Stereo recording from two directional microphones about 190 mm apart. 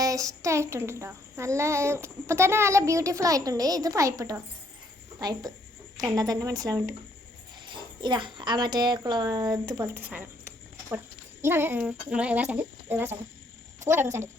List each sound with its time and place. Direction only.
0.0 s child singing: 15° right (ahead or behind)
5.2 s speech: 20° right (ahead or behind)
11.4 s child singing: 10° right (ahead or behind)